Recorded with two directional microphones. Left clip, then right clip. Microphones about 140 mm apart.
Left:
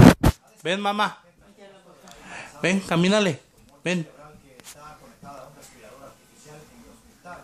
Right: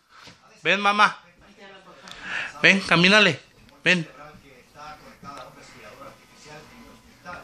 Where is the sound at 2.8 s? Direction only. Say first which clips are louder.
Right 5 dB; 35° left (ahead or behind).